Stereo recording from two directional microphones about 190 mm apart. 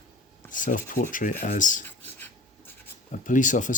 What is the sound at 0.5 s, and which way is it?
Speech, 45° left (ahead or behind).